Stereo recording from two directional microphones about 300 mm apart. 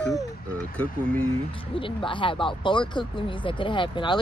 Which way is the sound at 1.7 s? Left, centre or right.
Centre.